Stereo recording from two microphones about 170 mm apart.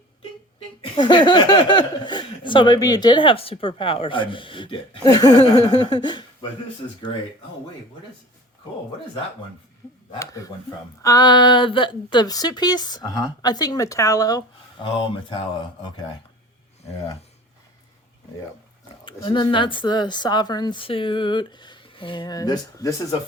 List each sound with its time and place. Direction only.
0.9 s speech: 25° left (ahead or behind)
10.1 s speech: 20° left (ahead or behind)
19.0 s speech: 30° left (ahead or behind)